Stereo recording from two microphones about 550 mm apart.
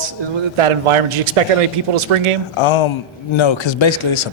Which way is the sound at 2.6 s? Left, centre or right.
Left.